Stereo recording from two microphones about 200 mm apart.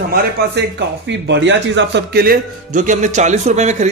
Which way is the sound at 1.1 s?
60° right (ahead or behind).